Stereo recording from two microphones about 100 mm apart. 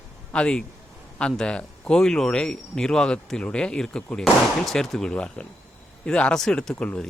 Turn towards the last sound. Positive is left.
turn(degrees=10)  # may be behind; listen again after turning